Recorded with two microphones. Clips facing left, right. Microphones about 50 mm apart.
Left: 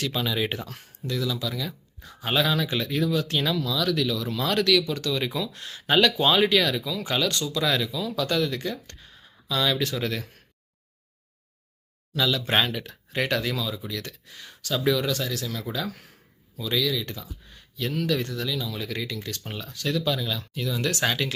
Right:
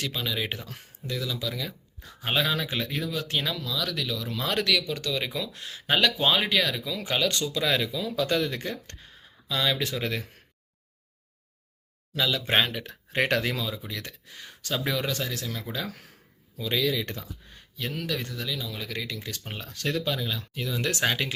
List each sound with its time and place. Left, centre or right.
0.1 s speech: centre
0.7 s speech: centre; by 9.0 s right
9.5 s speech: centre
12.1 s speech: centre
12.8 s speech: right
13.7 s speech: right
16.8 s speech: right
17.7 s speech: centre
19.5 s speech: right
20.1 s speech: centre